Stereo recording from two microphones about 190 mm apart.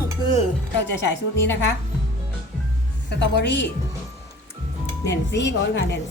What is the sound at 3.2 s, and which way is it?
Speech, 65° left (ahead or behind).